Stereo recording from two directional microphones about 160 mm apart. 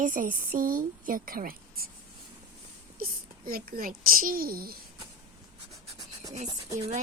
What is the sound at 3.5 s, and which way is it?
Speech, 65° right (ahead or behind).